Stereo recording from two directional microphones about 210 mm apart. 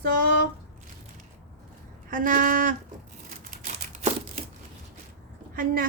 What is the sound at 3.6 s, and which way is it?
Crumpling, 30° right (ahead or behind).